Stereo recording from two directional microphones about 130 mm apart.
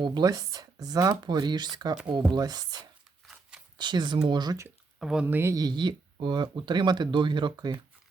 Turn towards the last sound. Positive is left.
turn(degrees=-35)  # may be behind; listen again after turning